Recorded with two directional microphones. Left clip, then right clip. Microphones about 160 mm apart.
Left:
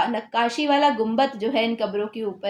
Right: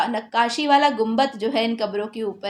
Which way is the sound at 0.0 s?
25° right (ahead or behind).